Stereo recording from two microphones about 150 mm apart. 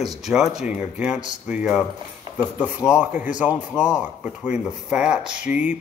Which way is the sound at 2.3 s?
30° right (ahead or behind).